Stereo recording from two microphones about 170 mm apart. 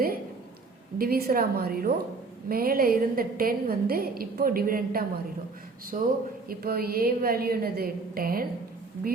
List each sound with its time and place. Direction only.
0.9 s a woman's voice: 60° right (ahead or behind)
5.9 s speech: 45° right (ahead or behind)
6.5 s a woman's voice: 60° right (ahead or behind)